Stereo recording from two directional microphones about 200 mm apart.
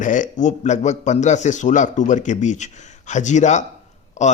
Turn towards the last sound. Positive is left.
turn(degrees=35)  # may be behind; listen again after turning